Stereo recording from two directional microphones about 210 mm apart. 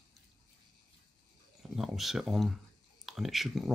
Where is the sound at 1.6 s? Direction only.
Centre (ahead or behind).